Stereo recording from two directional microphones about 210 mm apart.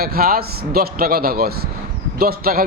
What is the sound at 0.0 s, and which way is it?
A man's voice, 45° right (ahead or behind).